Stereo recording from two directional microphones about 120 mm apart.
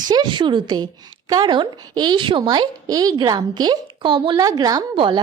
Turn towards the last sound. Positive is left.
turn(degrees=-45)  # may be behind; listen again after turning